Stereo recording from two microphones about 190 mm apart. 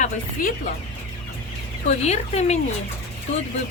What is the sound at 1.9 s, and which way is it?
Speech, 35° left (ahead or behind).